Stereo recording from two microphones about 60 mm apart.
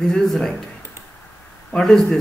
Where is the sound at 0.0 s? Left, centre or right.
Centre.